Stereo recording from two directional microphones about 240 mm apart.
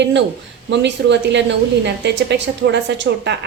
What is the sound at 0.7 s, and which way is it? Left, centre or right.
A woman's voice, right.